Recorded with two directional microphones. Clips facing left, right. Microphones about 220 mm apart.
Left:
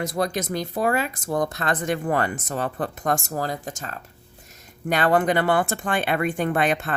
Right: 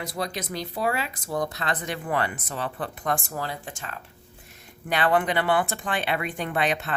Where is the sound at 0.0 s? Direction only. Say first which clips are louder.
Left 6 dB; 45° left (ahead or behind).